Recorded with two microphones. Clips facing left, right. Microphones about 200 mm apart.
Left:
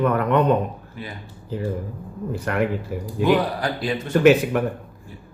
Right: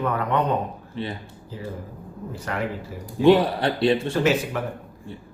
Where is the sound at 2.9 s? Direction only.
60° left (ahead or behind).